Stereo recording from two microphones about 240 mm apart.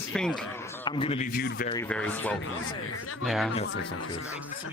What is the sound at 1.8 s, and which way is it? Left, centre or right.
Speech, centre.